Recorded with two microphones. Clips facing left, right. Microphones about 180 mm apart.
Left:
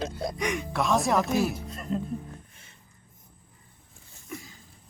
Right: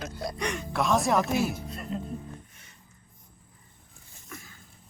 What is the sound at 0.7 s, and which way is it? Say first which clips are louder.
Speech: right 1 dB; centre (ahead or behind).